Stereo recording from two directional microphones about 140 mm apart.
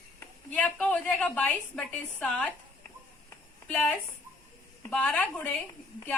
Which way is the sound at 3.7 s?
10° left (ahead or behind).